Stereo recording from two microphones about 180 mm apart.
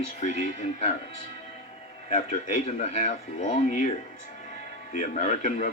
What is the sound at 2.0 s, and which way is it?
Speech, 35° left (ahead or behind).